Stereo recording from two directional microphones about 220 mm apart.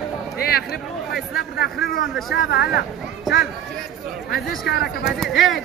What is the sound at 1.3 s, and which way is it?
Speech, 45° left (ahead or behind).